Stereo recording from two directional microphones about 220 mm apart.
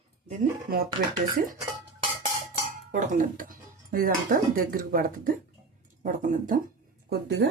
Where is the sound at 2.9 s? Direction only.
35° right (ahead or behind).